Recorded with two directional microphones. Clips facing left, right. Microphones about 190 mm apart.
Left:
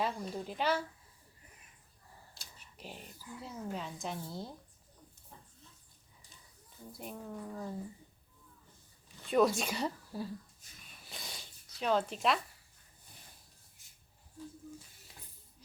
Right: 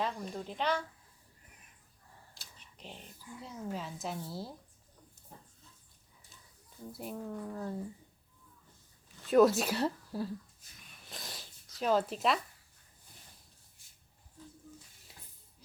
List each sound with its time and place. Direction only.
0.0 s speech: 5° left (ahead or behind)
2.3 s speech: 5° left (ahead or behind)
6.9 s a woman's voice: 5° right (ahead or behind)
9.2 s a woman's voice: centre (ahead or behind)
11.0 s zipper: centre (ahead or behind)
15.1 s a sound: 5° right (ahead or behind)